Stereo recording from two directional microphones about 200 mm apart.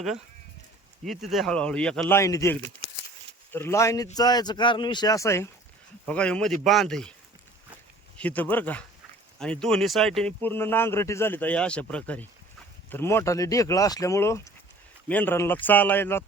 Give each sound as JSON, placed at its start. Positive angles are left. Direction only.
{"t": 1.0, "sound": "a man's voice", "side_deg": 0}
{"t": 8.2, "sound": "speech", "side_deg": 10}